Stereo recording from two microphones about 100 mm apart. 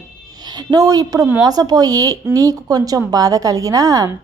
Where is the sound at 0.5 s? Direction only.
40° right (ahead or behind).